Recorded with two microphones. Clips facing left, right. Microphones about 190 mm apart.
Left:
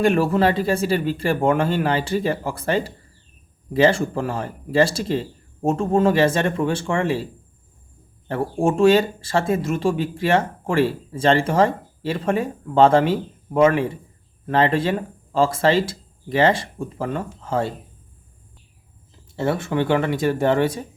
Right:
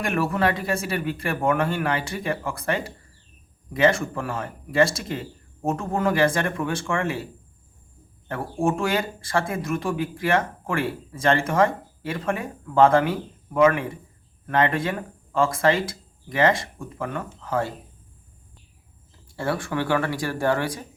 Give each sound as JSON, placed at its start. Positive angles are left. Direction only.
{"t": 0.0, "sound": "speech", "side_deg": 25}
{"t": 8.3, "sound": "speech", "side_deg": 25}
{"t": 19.4, "sound": "speech", "side_deg": 25}